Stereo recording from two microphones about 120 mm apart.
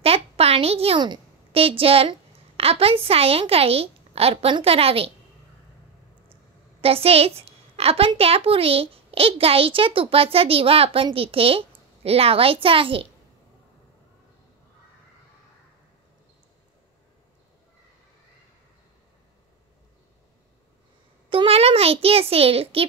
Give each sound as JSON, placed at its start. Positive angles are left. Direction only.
{"t": 0.0, "sound": "a sound", "side_deg": -55}
{"t": 0.9, "sound": "a woman's voice", "side_deg": -40}
{"t": 6.8, "sound": "a woman's voice", "side_deg": -55}
{"t": 21.3, "sound": "a child's voice", "side_deg": -50}